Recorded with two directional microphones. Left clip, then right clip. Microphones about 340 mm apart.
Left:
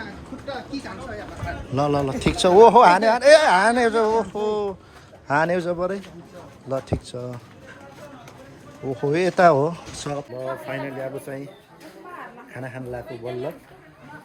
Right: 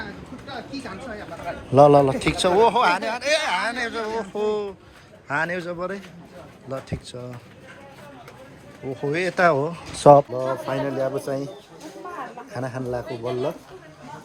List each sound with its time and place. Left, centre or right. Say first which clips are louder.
1.7 s speech: right 9 dB; centre
9.0 s speech: left 3 dB; centre
10.7 s speech: right 5 dB; centre
12.5 s speech: right 5 dB; centre
13.1 s speech: right 4 dB; right